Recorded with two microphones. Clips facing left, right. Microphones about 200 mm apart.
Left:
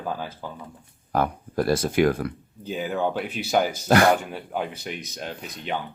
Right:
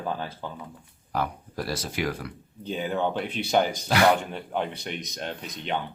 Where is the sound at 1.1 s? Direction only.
55° left (ahead or behind).